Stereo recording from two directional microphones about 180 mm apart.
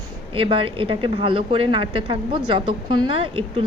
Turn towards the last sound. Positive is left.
turn(degrees=-30)  # may be behind; listen again after turning